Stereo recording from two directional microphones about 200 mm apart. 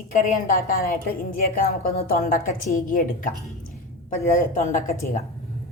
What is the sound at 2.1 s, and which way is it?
A woman's voice, 45° left (ahead or behind).